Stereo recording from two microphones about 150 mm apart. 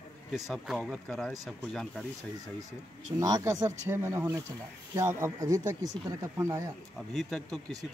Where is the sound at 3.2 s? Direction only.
25° right (ahead or behind).